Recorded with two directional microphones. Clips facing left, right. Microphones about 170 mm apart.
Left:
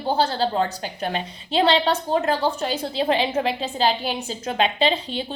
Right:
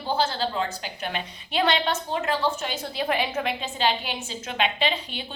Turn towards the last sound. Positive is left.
turn(degrees=35)  # may be behind; listen again after turning